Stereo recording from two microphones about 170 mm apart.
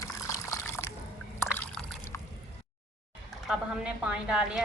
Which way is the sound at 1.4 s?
5° left (ahead or behind).